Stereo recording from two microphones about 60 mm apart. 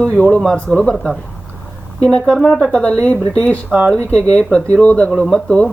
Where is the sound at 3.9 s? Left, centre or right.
Centre.